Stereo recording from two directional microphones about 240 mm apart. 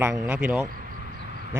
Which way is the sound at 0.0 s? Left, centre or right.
Centre.